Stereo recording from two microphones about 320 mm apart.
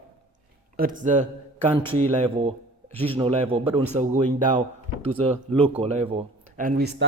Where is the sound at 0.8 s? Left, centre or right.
Right.